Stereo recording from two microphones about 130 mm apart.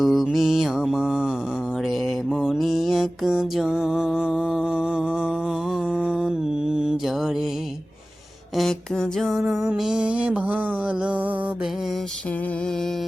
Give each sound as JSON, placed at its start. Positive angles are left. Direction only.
{"t": 0.0, "sound": "mantra", "side_deg": 0}
{"t": 1.8, "sound": "music", "side_deg": 0}
{"t": 8.5, "sound": "music", "side_deg": 5}